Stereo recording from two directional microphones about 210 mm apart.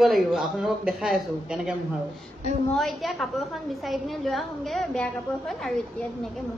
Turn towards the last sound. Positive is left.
turn(degrees=0)  # may be behind; listen again after turning